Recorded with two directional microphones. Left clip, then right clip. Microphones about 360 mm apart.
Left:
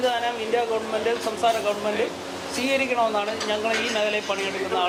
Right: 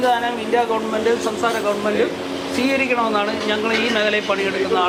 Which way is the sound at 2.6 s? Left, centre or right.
Centre.